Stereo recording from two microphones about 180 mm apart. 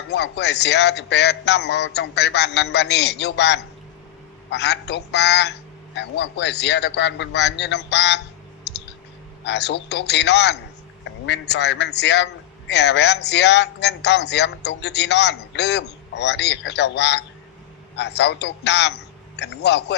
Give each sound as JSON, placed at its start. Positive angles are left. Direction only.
{"t": 0.1, "sound": "a man's voice", "side_deg": 70}
{"t": 8.7, "sound": "clicking", "side_deg": 70}
{"t": 9.4, "sound": "a man's voice", "side_deg": 70}